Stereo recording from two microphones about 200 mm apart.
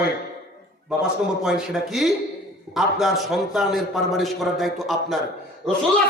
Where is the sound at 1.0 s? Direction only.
5° right (ahead or behind).